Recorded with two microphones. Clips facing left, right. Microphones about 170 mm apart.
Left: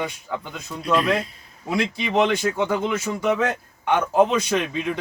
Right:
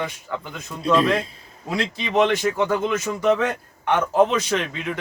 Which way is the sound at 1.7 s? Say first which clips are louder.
Left 1 dB; 10° left (ahead or behind).